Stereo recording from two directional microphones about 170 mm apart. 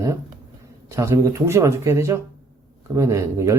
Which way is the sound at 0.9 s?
20° right (ahead or behind).